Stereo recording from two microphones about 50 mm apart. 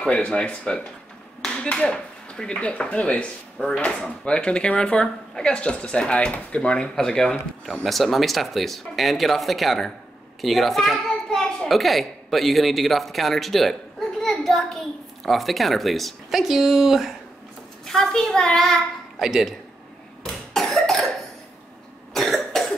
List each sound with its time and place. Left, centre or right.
0.1 s speech: centre
3.5 s speech: centre
17.8 s speech: centre
19.1 s speech: centre
20.5 s cough: centre
22.1 s cough: centre